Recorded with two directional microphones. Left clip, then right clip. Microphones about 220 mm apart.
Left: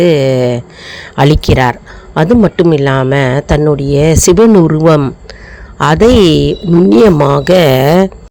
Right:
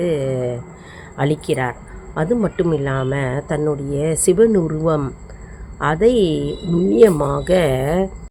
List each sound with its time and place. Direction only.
0.0 s speech: 45° left (ahead or behind)